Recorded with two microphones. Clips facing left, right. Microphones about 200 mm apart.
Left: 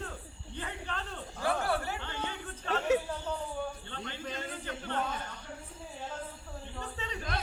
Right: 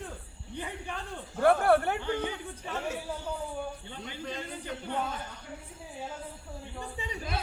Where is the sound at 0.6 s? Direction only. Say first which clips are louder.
Right 2 dB; 15° right (ahead or behind).